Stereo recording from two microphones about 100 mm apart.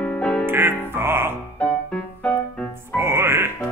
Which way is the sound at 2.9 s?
25° right (ahead or behind).